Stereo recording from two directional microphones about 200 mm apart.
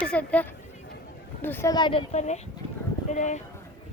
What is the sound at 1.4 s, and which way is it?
A woman's voice, 10° left (ahead or behind).